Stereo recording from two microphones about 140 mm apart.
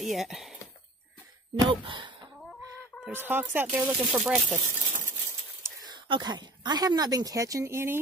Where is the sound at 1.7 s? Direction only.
35° right (ahead or behind).